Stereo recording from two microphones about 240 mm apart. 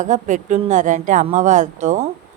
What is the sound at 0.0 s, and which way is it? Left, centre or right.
Speech, right.